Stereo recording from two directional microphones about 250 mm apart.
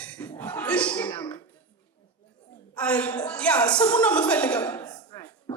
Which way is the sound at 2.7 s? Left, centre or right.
Centre.